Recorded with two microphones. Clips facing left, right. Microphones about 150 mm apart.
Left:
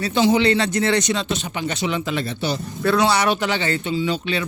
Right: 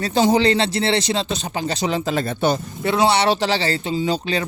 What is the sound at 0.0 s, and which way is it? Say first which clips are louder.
Speech: right 1 dB; 40° right (ahead or behind).